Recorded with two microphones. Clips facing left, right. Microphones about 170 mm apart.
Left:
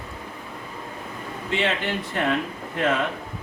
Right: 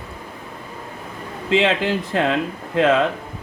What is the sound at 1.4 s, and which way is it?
Speech, 90° right.